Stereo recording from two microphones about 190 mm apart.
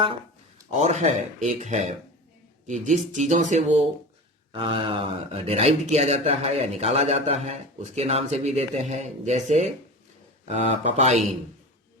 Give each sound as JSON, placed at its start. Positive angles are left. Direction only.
{"t": 0.7, "sound": "speech", "side_deg": -40}
{"t": 4.5, "sound": "speech", "side_deg": -25}